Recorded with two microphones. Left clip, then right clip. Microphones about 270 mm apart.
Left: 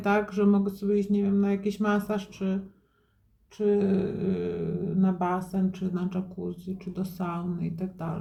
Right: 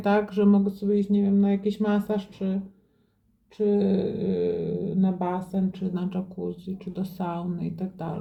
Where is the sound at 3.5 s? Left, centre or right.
Centre.